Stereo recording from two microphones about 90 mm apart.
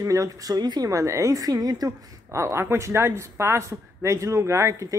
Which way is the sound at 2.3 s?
30° right (ahead or behind).